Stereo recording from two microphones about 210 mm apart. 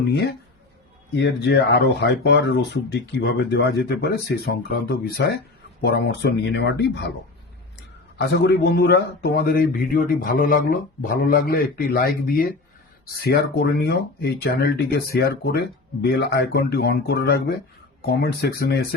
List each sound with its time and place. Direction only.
1.1 s speech: 55° left (ahead or behind)
8.3 s speech: 55° left (ahead or behind)